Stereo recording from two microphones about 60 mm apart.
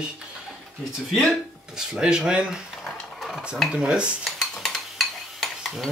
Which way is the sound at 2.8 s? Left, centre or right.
Centre.